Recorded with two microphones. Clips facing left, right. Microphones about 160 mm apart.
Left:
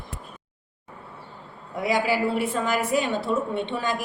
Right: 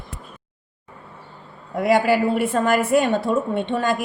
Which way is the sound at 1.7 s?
55° right (ahead or behind).